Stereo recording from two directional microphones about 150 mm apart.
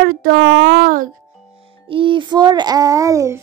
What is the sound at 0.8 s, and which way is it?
Speech, 65° right (ahead or behind).